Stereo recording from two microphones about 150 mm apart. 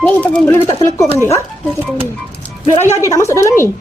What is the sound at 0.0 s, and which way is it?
Speech, 10° left (ahead or behind).